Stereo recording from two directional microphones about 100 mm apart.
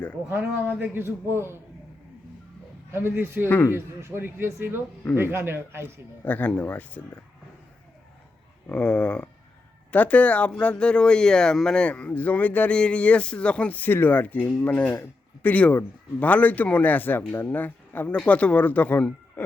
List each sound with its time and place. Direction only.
0.3 s a man's voice: 20° right (ahead or behind)
2.9 s a man's voice: 20° right (ahead or behind)
6.2 s speech: 15° left (ahead or behind)
8.7 s speech: 10° left (ahead or behind)